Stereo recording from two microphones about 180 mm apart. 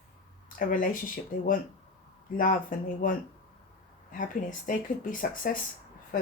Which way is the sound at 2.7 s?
50° left (ahead or behind).